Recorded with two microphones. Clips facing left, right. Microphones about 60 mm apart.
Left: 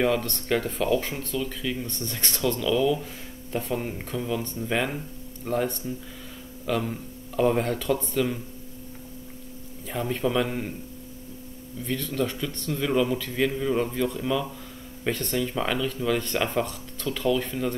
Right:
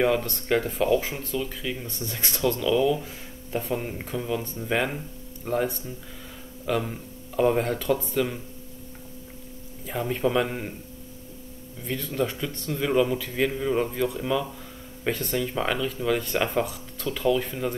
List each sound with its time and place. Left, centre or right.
0.0 s speech: centre
9.8 s speech: centre
11.8 s speech: centre